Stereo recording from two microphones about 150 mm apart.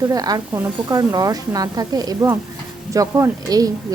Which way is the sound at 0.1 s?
25° right (ahead or behind).